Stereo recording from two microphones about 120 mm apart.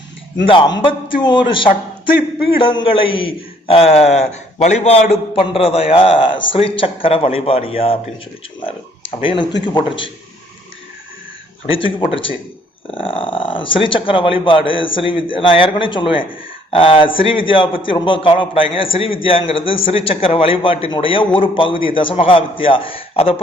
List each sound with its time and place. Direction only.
0.4 s a man's voice: 45° left (ahead or behind)
11.7 s a man's voice: 45° left (ahead or behind)